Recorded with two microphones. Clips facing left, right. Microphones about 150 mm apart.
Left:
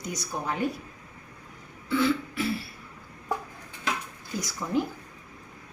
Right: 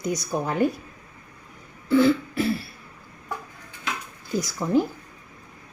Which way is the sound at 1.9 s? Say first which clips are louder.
Right 6 dB; 40° right (ahead or behind).